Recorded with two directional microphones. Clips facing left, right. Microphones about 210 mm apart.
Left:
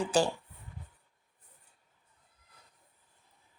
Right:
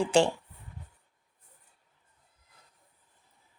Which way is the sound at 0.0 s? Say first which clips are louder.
Right 4 dB; 25° right (ahead or behind).